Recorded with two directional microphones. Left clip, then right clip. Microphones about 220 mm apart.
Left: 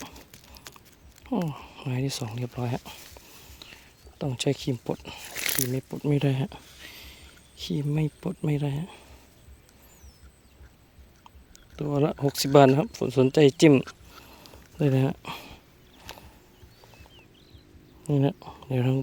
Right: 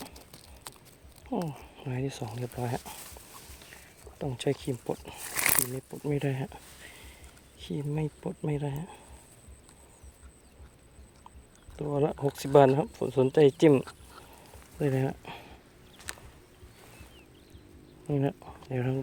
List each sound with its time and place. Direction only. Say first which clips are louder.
1.5 s speech: left 4 dB; 50° left (ahead or behind)
4.2 s speech: left 3 dB; 50° left (ahead or behind)
11.8 s speech: left 3 dB; 50° left (ahead or behind)
18.0 s speech: left 4 dB; 45° left (ahead or behind)